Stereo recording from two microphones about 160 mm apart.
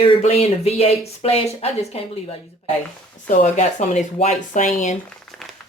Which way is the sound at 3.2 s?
50° left (ahead or behind).